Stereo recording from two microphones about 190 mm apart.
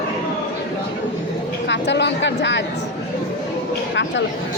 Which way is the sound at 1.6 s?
65° left (ahead or behind).